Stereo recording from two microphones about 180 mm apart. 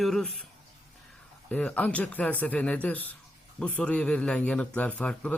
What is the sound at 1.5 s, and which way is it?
A man's voice, 5° left (ahead or behind).